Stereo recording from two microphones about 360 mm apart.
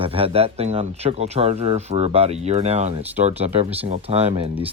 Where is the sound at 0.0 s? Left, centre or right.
Centre.